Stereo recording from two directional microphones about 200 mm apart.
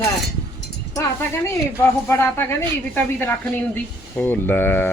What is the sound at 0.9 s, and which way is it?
Speech, 15° left (ahead or behind).